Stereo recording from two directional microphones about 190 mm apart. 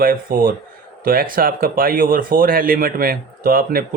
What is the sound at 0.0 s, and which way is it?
Speech, 50° right (ahead or behind).